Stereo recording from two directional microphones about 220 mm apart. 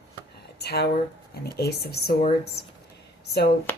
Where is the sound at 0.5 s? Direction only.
45° left (ahead or behind).